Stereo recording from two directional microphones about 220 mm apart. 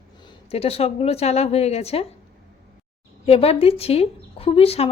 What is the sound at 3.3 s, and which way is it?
Speech, 25° left (ahead or behind).